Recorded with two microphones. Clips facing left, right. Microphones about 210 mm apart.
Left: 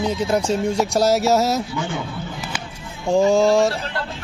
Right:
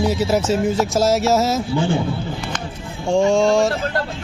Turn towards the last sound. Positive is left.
turn(degrees=0)  # may be behind; listen again after turning